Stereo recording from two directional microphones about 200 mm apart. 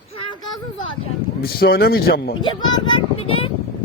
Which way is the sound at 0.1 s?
25° left (ahead or behind).